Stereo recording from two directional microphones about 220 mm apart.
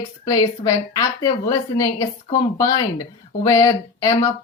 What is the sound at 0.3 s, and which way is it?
Speech, 15° left (ahead or behind).